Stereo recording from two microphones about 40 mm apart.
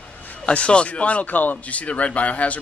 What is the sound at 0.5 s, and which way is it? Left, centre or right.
Speech, left.